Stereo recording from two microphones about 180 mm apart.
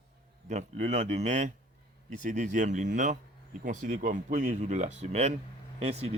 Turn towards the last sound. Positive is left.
turn(degrees=-35)  # may be behind; listen again after turning